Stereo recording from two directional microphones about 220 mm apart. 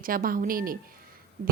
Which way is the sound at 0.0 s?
40° right (ahead or behind).